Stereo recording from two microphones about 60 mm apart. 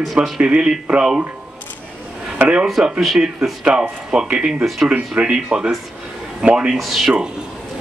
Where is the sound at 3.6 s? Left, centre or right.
Centre.